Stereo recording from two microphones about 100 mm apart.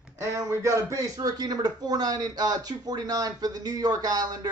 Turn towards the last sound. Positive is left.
turn(degrees=-40)  # may be behind; listen again after turning